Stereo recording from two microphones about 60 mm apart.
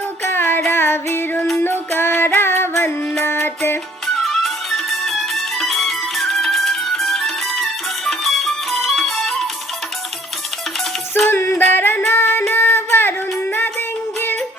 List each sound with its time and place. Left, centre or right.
0.3 s music: left
4.0 s music: centre
11.3 s music: left